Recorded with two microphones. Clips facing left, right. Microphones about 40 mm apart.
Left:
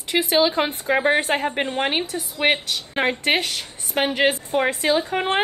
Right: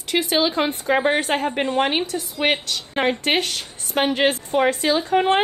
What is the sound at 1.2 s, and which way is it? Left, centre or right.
Speech, left.